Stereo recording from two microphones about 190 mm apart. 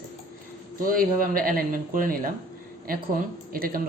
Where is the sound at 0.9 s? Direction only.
50° right (ahead or behind).